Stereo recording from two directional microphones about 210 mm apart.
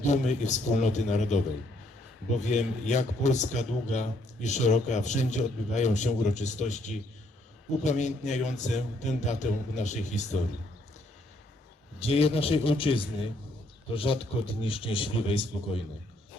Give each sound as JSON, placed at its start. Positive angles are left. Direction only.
{"t": 0.0, "sound": "a man's voice", "side_deg": 35}
{"t": 11.9, "sound": "speech", "side_deg": 30}